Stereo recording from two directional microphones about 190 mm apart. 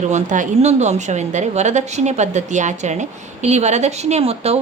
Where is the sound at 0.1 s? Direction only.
40° right (ahead or behind).